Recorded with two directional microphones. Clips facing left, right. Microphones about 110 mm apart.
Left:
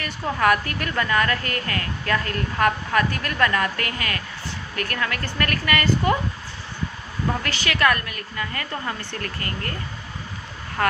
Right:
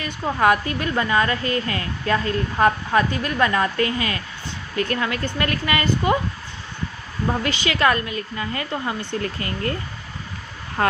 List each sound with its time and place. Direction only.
0.0 s a woman's voice: 25° right (ahead or behind)
7.4 s a woman's voice: 20° right (ahead or behind)
10.8 s a woman's voice: 25° right (ahead or behind)